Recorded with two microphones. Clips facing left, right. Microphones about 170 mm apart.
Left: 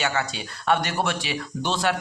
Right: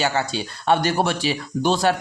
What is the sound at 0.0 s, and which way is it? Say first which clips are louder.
Speech: right 4 dB; 30° right (ahead or behind).